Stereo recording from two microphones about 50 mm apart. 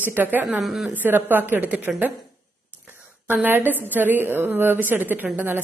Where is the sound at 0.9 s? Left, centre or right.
Right.